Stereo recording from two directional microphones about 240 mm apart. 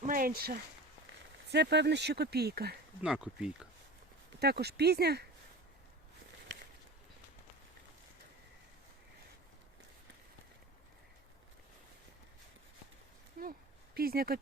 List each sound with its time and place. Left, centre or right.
0.0 s speech: right
3.0 s speech: centre
4.4 s speech: right
13.4 s a sound: right